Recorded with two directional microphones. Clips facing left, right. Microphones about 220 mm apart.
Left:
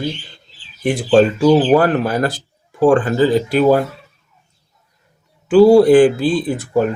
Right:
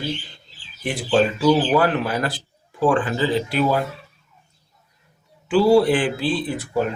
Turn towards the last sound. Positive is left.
turn(degrees=45)  # may be behind; listen again after turning